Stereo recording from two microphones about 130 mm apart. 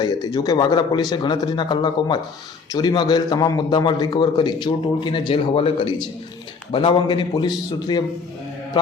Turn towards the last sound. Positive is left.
turn(degrees=35)  # may be behind; listen again after turning